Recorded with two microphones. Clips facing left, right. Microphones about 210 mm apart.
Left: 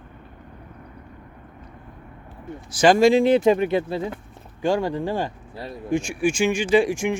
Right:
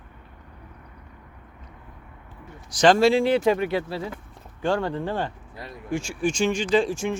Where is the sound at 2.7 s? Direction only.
10° left (ahead or behind).